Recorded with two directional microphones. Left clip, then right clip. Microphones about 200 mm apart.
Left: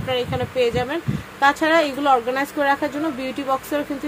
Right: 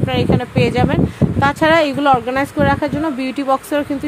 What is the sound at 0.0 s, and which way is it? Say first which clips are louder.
Speech: right 5 dB; 45° right (ahead or behind).